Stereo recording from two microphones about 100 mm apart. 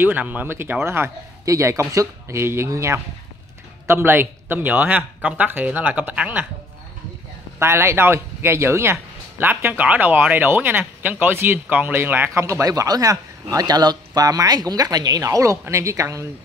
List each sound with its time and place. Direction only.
0.0 s speech: 15° right (ahead or behind)
7.5 s speech: 25° right (ahead or behind)